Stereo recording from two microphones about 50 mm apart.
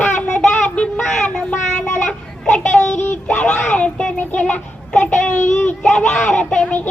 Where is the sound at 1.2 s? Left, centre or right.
Centre.